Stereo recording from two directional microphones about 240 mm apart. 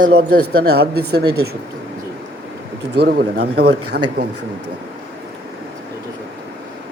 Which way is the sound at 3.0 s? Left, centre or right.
Right.